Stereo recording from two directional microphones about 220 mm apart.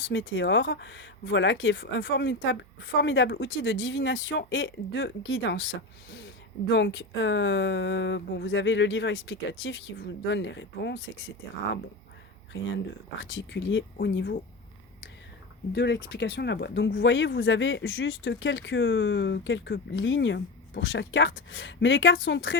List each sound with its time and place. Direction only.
0.0 s speech: 60° left (ahead or behind)
13.2 s speech: 60° left (ahead or behind)
15.7 s speech: 50° left (ahead or behind)